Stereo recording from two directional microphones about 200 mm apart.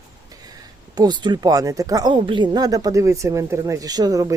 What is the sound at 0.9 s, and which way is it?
Speech, 20° right (ahead or behind).